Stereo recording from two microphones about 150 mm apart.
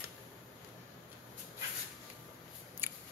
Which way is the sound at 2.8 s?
15° right (ahead or behind).